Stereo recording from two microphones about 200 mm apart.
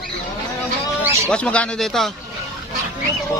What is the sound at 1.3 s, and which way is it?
Speech, 5° left (ahead or behind).